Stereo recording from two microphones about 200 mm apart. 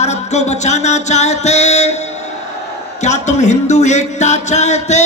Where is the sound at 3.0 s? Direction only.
35° left (ahead or behind).